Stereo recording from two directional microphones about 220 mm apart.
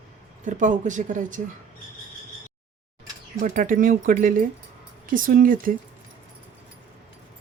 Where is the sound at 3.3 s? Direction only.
40° right (ahead or behind).